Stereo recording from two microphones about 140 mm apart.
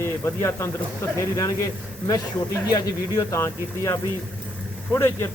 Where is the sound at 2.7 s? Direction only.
30° left (ahead or behind).